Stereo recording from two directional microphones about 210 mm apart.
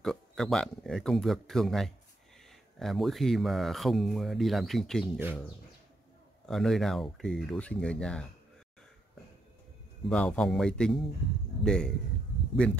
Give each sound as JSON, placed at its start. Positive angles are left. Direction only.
{"t": 0.0, "sound": "speech", "side_deg": 0}
{"t": 10.0, "sound": "speech", "side_deg": 5}